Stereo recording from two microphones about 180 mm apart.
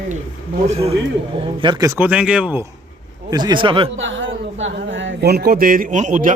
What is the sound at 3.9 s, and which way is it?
A man's voice, 90° right.